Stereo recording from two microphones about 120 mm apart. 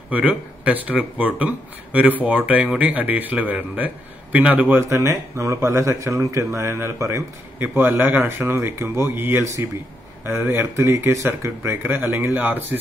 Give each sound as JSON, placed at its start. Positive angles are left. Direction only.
{"t": 0.1, "sound": "a man's voice", "side_deg": -10}